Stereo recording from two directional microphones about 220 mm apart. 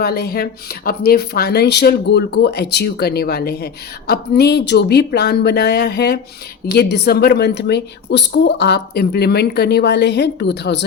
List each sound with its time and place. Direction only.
0.0 s speech: 45° left (ahead or behind)